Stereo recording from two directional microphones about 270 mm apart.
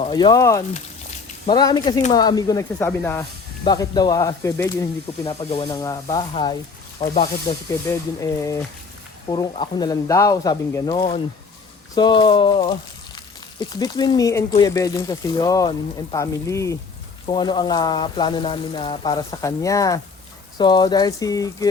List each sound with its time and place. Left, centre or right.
0.0 s speech: centre